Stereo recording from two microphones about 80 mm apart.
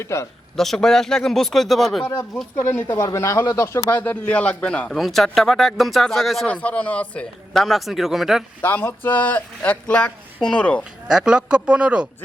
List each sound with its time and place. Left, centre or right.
0.0 s speech: left
0.5 s speech: centre
2.6 s speech: left
3.0 s speech: left
3.8 s speech: left
4.9 s speech: centre
6.5 s speech: centre
7.5 s speech: centre
8.6 s speech: left
11.1 s speech: centre